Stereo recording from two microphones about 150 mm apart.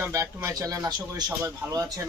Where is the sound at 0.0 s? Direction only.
20° right (ahead or behind).